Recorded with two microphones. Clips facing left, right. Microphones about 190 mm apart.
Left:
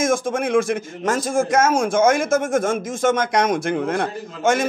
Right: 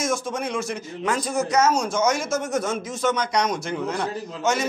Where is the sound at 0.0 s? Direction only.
50° left (ahead or behind).